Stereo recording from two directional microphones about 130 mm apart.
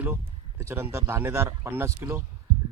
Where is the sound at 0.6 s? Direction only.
20° right (ahead or behind).